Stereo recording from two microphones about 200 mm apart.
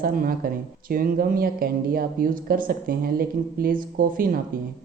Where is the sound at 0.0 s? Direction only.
45° right (ahead or behind).